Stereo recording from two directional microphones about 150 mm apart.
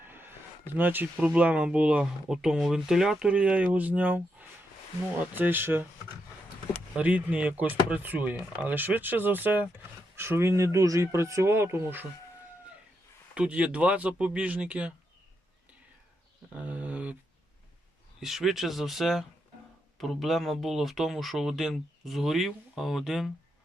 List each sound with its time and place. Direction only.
0.0 s a sound: 15° right (ahead or behind)
0.7 s speech: 15° right (ahead or behind)
6.9 s speech: 10° right (ahead or behind)
13.3 s speech: 5° right (ahead or behind)
16.6 s a sound: 10° right (ahead or behind)
18.2 s speech: centre (ahead or behind)